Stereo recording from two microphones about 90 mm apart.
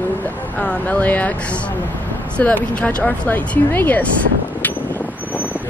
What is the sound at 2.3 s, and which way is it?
Speech, 15° left (ahead or behind).